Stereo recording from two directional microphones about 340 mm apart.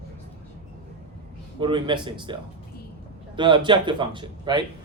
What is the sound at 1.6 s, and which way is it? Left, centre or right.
Speech, centre.